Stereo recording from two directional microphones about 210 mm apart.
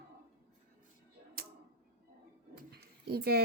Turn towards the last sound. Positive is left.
turn(degrees=-50)  # may be behind; listen again after turning